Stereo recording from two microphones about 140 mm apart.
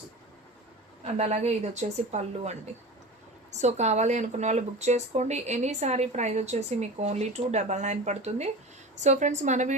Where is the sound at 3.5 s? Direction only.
55° right (ahead or behind).